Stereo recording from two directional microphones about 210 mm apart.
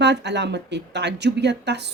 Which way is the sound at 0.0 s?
55° right (ahead or behind).